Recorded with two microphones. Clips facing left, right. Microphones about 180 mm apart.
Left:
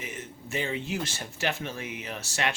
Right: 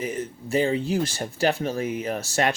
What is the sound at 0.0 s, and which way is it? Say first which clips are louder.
Speech: right 10 dB; 35° right (ahead or behind).